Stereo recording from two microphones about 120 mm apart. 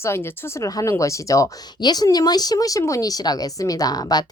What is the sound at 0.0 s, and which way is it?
Speech, 20° left (ahead or behind).